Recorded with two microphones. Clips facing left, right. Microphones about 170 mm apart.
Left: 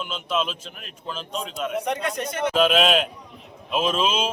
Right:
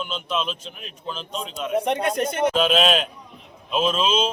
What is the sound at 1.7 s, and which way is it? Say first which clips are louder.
Speech: right 6 dB; 25° right (ahead or behind).